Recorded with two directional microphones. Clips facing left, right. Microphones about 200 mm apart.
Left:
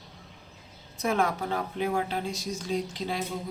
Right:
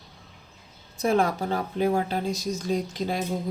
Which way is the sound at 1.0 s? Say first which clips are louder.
Right 4 dB; 30° right (ahead or behind).